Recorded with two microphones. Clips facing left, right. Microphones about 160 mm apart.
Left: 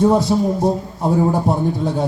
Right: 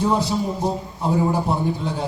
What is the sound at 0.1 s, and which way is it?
A man's voice, 45° left (ahead or behind).